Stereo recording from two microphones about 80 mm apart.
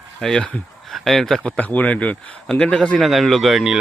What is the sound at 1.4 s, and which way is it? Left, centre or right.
Speech, centre.